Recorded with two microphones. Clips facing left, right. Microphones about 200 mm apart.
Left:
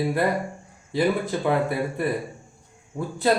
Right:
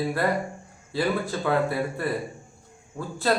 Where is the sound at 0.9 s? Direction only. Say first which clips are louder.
Left 3 dB; 20° left (ahead or behind).